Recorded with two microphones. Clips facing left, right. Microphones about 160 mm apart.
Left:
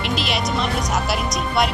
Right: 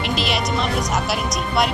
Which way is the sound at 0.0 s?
Centre (ahead or behind).